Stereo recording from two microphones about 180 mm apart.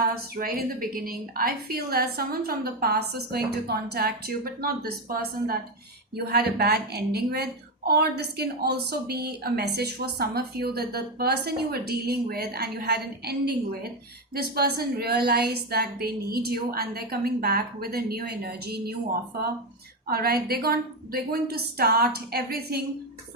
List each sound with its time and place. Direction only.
0.1 s a woman's voice: 55° right (ahead or behind)
20.1 s a woman's voice: 55° right (ahead or behind)